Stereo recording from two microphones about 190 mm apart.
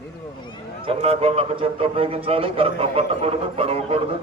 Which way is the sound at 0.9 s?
30° right (ahead or behind).